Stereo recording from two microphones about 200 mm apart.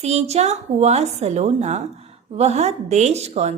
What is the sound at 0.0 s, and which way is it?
A woman's voice, 35° right (ahead or behind).